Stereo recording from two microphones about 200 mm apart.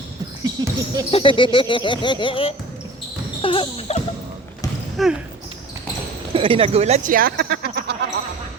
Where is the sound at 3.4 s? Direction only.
25° left (ahead or behind).